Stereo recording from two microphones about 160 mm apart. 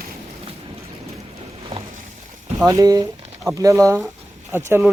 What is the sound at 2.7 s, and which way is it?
Speech, 20° right (ahead or behind).